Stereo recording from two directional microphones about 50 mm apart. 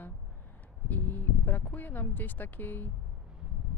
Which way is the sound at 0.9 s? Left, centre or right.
Left.